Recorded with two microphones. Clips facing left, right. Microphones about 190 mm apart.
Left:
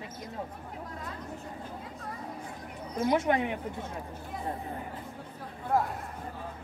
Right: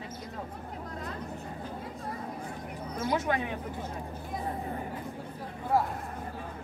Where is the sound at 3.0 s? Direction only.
20° left (ahead or behind).